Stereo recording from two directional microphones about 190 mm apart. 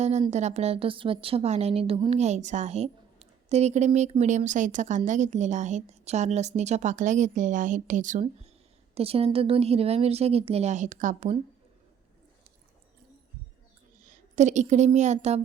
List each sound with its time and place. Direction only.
0.0 s a woman's voice: 35° right (ahead or behind)
14.3 s a woman's voice: 40° right (ahead or behind)